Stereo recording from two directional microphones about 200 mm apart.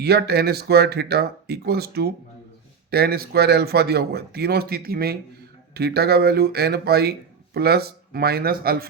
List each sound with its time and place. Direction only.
0.0 s a man's voice: 55° right (ahead or behind)